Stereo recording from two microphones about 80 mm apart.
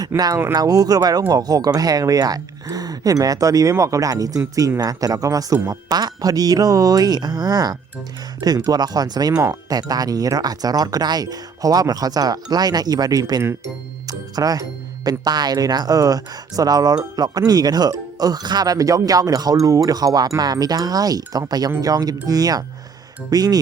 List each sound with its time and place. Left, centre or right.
0.1 s speech: right
0.5 s speech: right